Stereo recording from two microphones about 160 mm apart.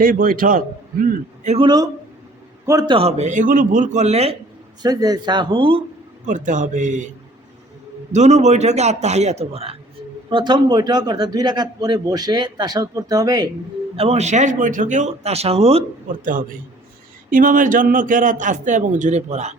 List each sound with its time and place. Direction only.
0.0 s a man's voice: 60° right (ahead or behind)
1.5 s a man's voice: 25° right (ahead or behind)
2.9 s a man's voice: 40° right (ahead or behind)
4.8 s a man's voice: 25° right (ahead or behind)
6.2 s a man's voice: 50° right (ahead or behind)
8.1 s a man's voice: 45° right (ahead or behind); by 13.5 s 25° right (ahead or behind)
13.9 s a man's voice: 40° right (ahead or behind)
16.2 s a man's voice: 55° right (ahead or behind)